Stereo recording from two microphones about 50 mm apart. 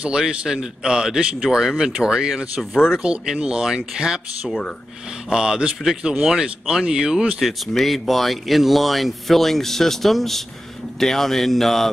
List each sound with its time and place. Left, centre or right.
0.1 s speech: centre
7.4 s speech: centre